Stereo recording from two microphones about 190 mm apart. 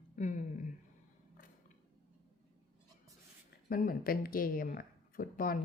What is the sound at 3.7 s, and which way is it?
Speech, 50° left (ahead or behind).